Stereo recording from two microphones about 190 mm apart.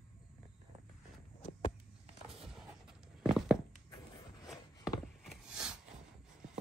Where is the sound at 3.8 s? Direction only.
20° left (ahead or behind).